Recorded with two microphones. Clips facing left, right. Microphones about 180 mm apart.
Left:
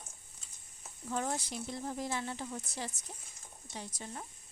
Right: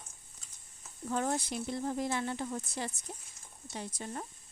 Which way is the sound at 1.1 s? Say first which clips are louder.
Right 3 dB; 60° right (ahead or behind).